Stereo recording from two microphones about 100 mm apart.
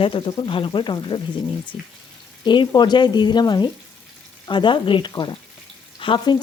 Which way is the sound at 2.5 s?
50° left (ahead or behind).